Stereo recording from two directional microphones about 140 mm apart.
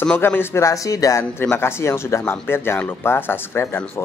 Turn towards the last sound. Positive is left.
turn(degrees=15)  # may be behind; listen again after turning